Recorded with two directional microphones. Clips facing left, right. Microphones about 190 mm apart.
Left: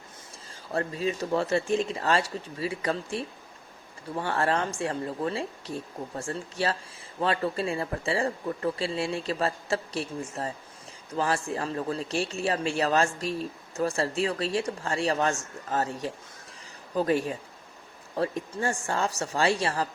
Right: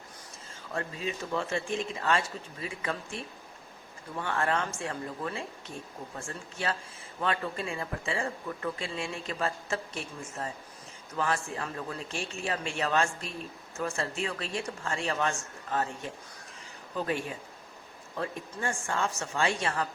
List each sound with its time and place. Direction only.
0.7 s speech: 40° left (ahead or behind)